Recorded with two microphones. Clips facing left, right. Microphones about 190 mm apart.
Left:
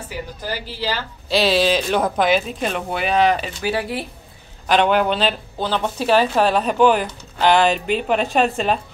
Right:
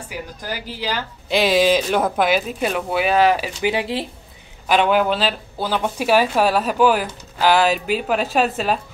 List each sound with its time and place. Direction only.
0.1 s speech: 10° right (ahead or behind)
3.6 s speech: 20° right (ahead or behind)
4.6 s speech: 5° right (ahead or behind)